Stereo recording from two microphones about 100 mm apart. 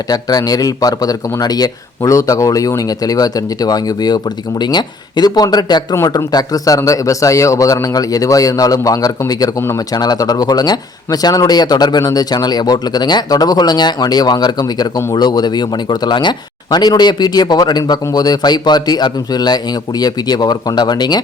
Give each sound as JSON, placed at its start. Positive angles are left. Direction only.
{"t": 0.1, "sound": "speech", "side_deg": 40}